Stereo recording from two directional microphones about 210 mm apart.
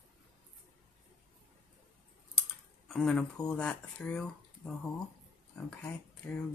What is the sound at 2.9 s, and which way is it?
Speech, centre (ahead or behind).